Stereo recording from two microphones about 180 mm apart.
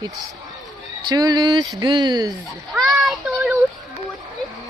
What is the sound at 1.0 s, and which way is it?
Speech, 20° right (ahead or behind).